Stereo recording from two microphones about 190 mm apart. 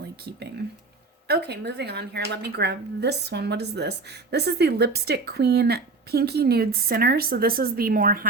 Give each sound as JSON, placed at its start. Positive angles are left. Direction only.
{"t": 1.3, "sound": "a woman's voice", "side_deg": -60}